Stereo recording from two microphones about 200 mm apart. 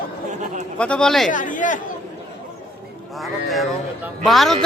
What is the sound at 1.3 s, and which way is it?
Speech, 40° left (ahead or behind).